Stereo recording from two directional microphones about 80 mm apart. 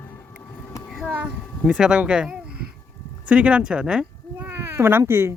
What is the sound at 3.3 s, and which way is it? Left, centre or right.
Speech, centre.